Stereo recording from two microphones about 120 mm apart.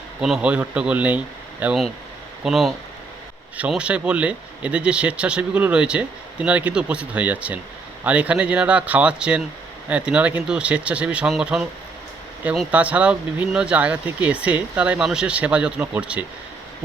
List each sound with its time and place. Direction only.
0.2 s speech: 10° right (ahead or behind)
12.7 s speech: 10° right (ahead or behind)